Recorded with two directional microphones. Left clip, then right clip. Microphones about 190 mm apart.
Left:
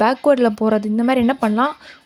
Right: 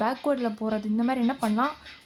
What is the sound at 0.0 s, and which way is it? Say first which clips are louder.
Speech: left 12 dB; 35° left (ahead or behind).